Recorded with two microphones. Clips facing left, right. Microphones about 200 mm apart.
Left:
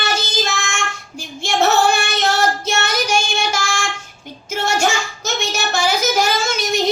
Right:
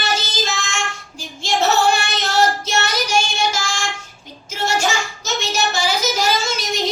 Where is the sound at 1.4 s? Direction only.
55° left (ahead or behind).